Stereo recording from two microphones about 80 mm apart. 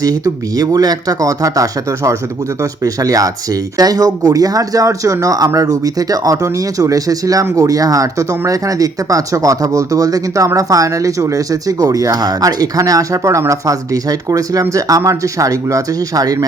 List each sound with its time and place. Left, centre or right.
0.0 s speech: right